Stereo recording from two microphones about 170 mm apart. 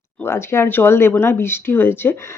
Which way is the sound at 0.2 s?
15° left (ahead or behind).